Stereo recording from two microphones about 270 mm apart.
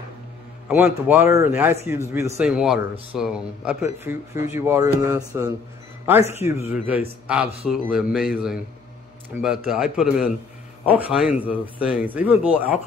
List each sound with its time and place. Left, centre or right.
0.7 s a man's voice: centre